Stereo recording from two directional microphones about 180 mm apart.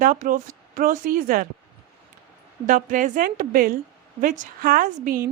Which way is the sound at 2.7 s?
45° right (ahead or behind).